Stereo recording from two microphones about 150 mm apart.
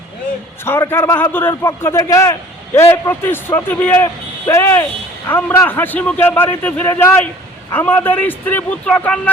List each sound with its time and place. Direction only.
0.6 s a man's voice: 15° left (ahead or behind)